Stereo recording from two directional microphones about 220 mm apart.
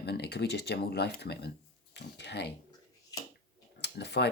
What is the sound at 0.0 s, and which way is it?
Speech, 50° left (ahead or behind).